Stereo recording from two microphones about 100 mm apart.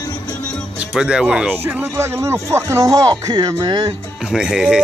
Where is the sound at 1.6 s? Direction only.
25° right (ahead or behind); by 3.9 s 45° right (ahead or behind).